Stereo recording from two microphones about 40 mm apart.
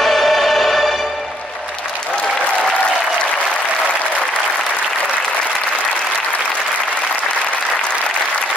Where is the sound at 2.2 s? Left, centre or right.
Left.